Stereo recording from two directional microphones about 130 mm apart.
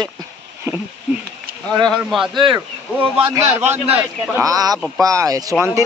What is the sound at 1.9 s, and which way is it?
Speech, centre (ahead or behind).